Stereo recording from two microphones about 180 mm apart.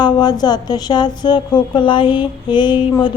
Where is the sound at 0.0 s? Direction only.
20° left (ahead or behind).